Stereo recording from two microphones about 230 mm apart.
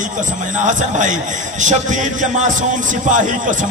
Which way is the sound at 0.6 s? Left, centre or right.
Right.